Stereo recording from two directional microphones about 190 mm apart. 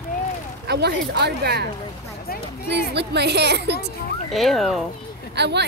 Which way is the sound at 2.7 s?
60° right (ahead or behind).